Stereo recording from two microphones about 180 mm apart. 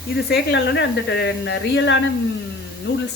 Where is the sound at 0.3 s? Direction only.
75° left (ahead or behind).